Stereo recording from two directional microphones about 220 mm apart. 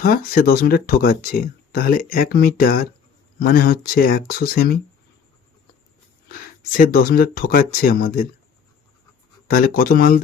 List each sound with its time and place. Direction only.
0.0 s speech: 40° left (ahead or behind)
6.2 s speech: 40° left (ahead or behind)
9.5 s speech: 40° left (ahead or behind)